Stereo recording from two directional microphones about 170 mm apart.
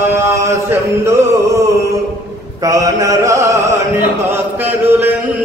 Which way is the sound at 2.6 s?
20° right (ahead or behind).